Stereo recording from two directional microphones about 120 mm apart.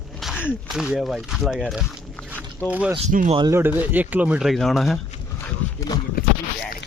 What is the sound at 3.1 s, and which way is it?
Speech, 90° right.